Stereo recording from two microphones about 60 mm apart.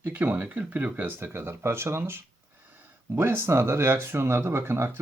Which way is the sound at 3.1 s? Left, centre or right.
Right.